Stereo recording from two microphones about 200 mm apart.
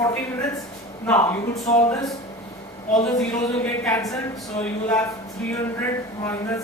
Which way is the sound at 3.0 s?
10° left (ahead or behind).